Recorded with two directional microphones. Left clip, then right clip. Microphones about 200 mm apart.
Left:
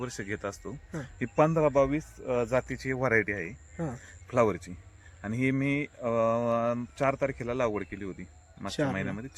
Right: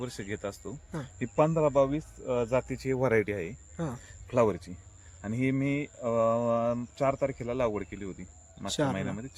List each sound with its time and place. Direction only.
0.0 s speech: 5° right (ahead or behind)
2.5 s speech: 25° right (ahead or behind); by 3.5 s 50° right (ahead or behind)
3.8 s speech: centre (ahead or behind)
4.3 s speech: 10° right (ahead or behind)